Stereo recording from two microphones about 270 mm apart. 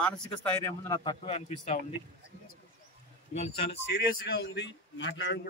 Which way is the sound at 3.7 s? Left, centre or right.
Left.